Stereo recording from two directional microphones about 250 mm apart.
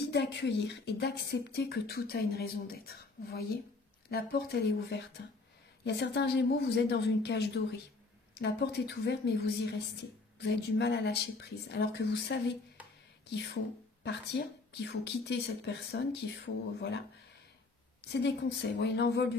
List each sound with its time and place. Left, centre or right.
0.0 s a woman's voice: left
14.3 s speech: left
18.2 s a woman's voice: left